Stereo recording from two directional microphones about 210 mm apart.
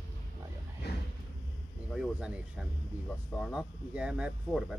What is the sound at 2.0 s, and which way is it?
Speech, 5° right (ahead or behind).